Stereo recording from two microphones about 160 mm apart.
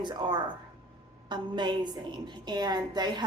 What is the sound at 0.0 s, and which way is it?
A woman's voice, 30° right (ahead or behind).